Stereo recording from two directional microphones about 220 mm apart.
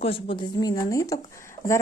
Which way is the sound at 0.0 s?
25° left (ahead or behind).